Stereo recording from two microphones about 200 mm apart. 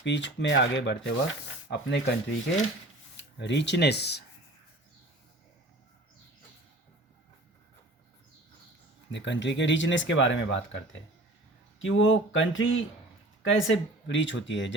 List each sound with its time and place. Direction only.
0.0 s speech: 65° left (ahead or behind)
3.2 s speech: 60° left (ahead or behind)
9.1 s speech: 65° left (ahead or behind)
11.8 s speech: 75° left (ahead or behind)